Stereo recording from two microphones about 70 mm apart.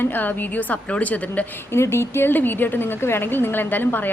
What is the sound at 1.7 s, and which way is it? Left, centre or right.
A woman's voice, left.